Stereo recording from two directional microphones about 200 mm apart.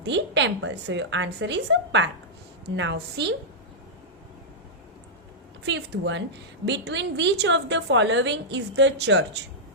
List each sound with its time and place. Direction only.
0.0 s a woman's voice: 60° right (ahead or behind)
5.6 s a woman's voice: 60° right (ahead or behind)